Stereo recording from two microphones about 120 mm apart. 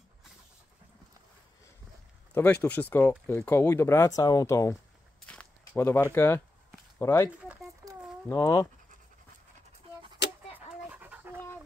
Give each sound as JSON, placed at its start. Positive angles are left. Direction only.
{"t": 2.3, "sound": "speech", "side_deg": 15}
{"t": 5.2, "sound": "walk", "side_deg": 10}
{"t": 5.8, "sound": "speech", "side_deg": 20}
{"t": 7.8, "sound": "a sound", "side_deg": -30}
{"t": 8.3, "sound": "speech", "side_deg": 30}
{"t": 10.9, "sound": "dog", "side_deg": -15}